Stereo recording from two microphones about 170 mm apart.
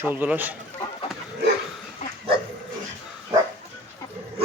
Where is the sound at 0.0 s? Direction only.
10° right (ahead or behind).